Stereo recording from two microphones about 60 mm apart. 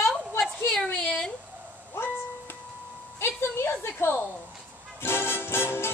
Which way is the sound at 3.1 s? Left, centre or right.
Left.